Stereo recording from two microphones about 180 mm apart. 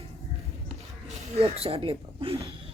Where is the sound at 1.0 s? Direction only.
35° right (ahead or behind).